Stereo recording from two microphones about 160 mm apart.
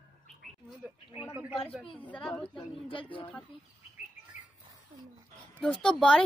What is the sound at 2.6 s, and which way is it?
Speech, 35° left (ahead or behind).